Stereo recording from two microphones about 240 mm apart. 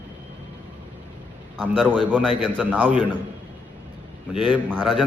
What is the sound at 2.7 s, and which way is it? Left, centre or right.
Speech, centre.